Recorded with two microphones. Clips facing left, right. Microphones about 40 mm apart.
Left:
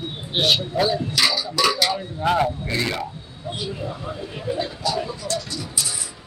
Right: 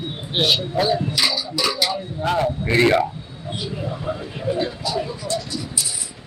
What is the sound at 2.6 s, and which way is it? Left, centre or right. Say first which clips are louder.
Speech: right 9 dB; right.